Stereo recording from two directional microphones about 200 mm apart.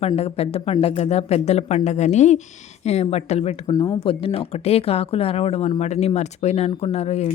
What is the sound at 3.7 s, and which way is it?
Speech, 15° left (ahead or behind).